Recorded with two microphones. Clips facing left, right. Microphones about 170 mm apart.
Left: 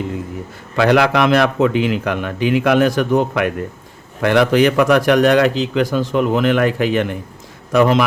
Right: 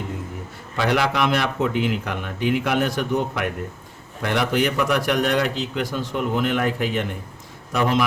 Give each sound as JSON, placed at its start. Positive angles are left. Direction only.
{"t": 0.8, "sound": "a man's voice", "side_deg": 90}